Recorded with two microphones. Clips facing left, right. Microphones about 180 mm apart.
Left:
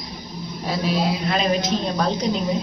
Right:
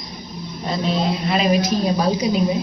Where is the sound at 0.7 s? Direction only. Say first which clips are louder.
Right 1 dB; 5° left (ahead or behind).